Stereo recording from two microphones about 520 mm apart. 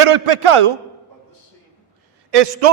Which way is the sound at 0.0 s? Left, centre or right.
Right.